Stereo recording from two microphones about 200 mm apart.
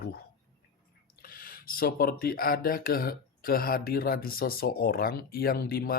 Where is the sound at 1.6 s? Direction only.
45° left (ahead or behind).